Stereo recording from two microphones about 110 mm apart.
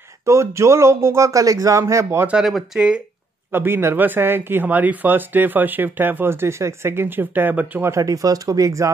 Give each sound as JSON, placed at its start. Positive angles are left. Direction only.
{"t": 0.2, "sound": "speech", "side_deg": -25}
{"t": 2.3, "sound": "speech", "side_deg": -5}
{"t": 3.5, "sound": "speech", "side_deg": -20}
{"t": 7.9, "sound": "speech", "side_deg": -30}